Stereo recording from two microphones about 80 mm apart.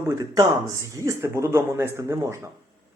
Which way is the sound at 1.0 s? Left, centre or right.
Right.